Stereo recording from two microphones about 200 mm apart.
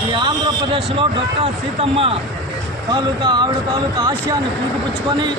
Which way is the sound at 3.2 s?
20° right (ahead or behind).